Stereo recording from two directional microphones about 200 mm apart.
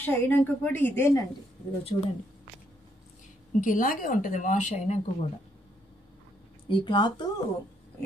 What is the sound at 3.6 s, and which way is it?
A woman's voice, 45° left (ahead or behind).